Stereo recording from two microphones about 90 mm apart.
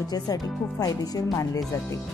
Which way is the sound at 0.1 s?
45° left (ahead or behind).